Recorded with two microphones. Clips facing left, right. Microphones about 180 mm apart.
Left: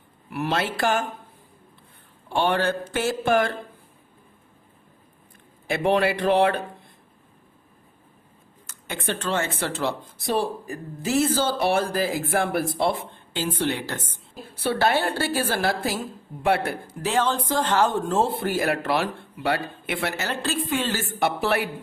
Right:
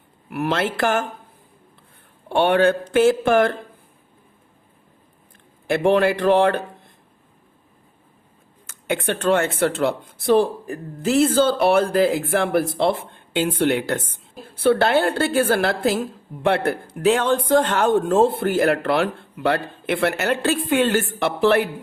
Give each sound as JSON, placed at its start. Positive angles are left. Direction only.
{"t": 0.3, "sound": "speech", "side_deg": -55}
{"t": 2.3, "sound": "speech", "side_deg": -60}
{"t": 5.6, "sound": "speech", "side_deg": -50}
{"t": 8.9, "sound": "speech", "side_deg": -60}